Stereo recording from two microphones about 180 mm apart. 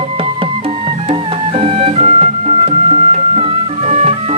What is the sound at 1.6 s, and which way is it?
Music, 35° right (ahead or behind).